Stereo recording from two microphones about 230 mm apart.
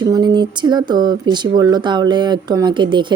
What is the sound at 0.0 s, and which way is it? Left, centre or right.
Speech, centre.